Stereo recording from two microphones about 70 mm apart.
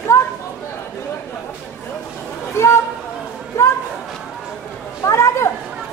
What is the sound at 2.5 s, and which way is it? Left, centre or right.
Chatter, left.